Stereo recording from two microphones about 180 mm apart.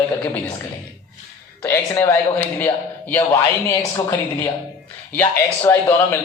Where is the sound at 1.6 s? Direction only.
15° left (ahead or behind).